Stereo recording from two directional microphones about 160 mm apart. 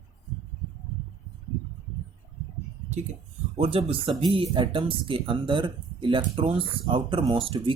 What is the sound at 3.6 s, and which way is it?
Speech, 35° right (ahead or behind).